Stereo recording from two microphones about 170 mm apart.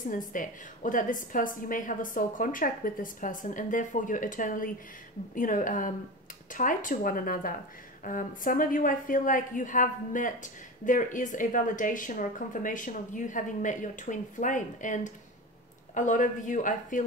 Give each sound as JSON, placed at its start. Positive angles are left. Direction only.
{"t": 0.3, "sound": "a woman's voice", "side_deg": 50}